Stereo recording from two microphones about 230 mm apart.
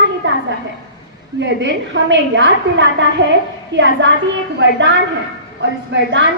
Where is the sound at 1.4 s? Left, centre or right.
Right.